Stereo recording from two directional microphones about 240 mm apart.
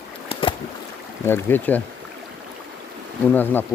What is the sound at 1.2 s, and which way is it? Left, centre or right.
Speech, centre.